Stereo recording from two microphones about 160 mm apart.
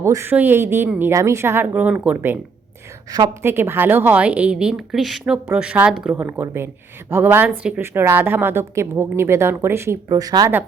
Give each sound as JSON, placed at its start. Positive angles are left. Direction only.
{"t": 0.0, "sound": "a woman's voice", "side_deg": -15}